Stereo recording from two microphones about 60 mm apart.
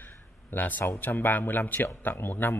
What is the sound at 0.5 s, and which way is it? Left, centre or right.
Speech, left.